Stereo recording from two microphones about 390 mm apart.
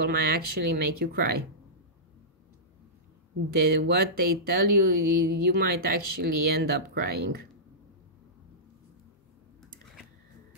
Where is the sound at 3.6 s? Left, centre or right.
Right.